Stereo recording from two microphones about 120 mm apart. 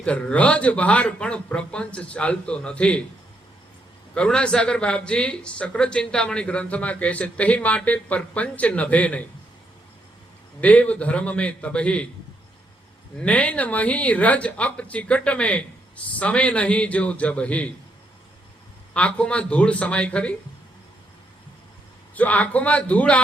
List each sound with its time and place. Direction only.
0.0 s speech: 10° left (ahead or behind)
4.1 s speech: 10° left (ahead or behind)
10.6 s speech: 10° left (ahead or behind)
13.1 s speech: 10° left (ahead or behind)
18.9 s speech: 10° left (ahead or behind)
22.1 s speech: 10° left (ahead or behind)